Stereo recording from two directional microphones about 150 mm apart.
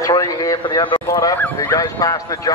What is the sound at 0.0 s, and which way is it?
Speech, 25° left (ahead or behind).